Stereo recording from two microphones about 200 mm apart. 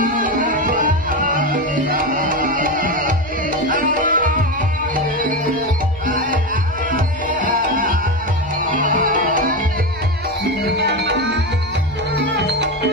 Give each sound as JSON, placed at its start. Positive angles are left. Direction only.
{"t": 0.0, "sound": "music", "side_deg": -40}
{"t": 7.2, "sound": "music", "side_deg": -40}
{"t": 10.8, "sound": "music", "side_deg": -60}